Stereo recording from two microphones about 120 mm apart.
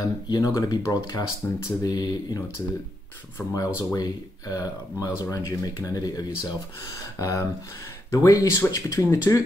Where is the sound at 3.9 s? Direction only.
30° left (ahead or behind).